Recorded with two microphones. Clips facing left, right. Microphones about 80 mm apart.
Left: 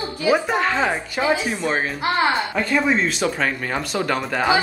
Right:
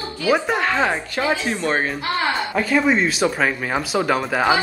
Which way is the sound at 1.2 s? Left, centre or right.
Centre.